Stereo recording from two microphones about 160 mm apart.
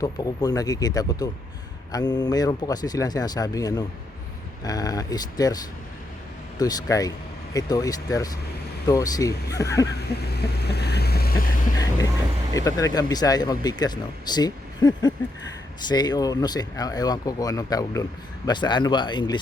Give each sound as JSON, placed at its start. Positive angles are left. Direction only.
{"t": 0.0, "sound": "speech", "side_deg": 25}
{"t": 6.6, "sound": "speech", "side_deg": 20}
{"t": 9.8, "sound": "a sound", "side_deg": 90}
{"t": 12.5, "sound": "speech", "side_deg": 20}